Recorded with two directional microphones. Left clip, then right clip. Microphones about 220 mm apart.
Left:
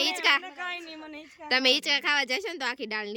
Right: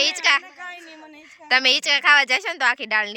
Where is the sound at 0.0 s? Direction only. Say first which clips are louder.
Right 5 dB; 10° left (ahead or behind).